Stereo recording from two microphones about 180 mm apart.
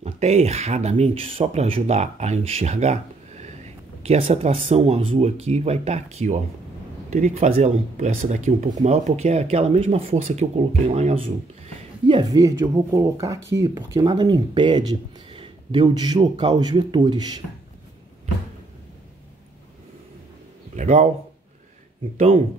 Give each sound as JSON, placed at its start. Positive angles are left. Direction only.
{"t": 0.0, "sound": "speech", "side_deg": -35}
{"t": 12.1, "sound": "speech", "side_deg": -25}
{"t": 20.7, "sound": "a sound", "side_deg": -40}
{"t": 22.1, "sound": "speech", "side_deg": -35}